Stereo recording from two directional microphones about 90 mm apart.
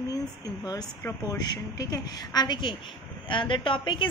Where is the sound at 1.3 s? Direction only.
45° left (ahead or behind).